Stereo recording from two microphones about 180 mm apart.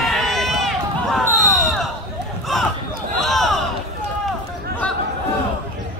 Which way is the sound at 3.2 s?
Centre (ahead or behind).